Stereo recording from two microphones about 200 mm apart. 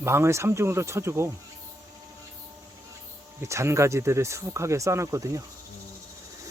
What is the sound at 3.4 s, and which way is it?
Speech, 15° right (ahead or behind).